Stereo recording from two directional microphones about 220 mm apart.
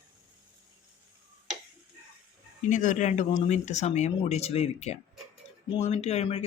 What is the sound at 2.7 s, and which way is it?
Speech, 35° left (ahead or behind).